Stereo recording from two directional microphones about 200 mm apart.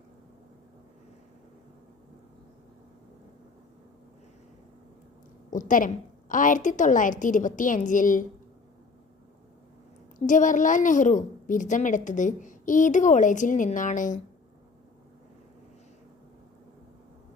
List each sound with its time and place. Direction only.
5.5 s a woman's voice: 40° left (ahead or behind)
10.2 s a woman's voice: 40° left (ahead or behind)